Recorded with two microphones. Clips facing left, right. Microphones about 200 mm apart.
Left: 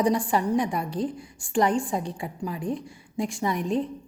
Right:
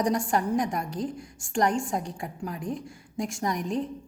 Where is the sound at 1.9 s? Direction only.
Centre (ahead or behind).